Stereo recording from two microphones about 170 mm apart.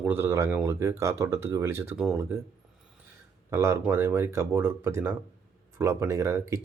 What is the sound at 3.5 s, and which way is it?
Speech, 15° right (ahead or behind).